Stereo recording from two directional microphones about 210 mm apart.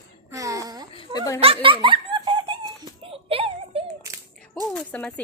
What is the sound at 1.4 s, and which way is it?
Giggle, 25° right (ahead or behind).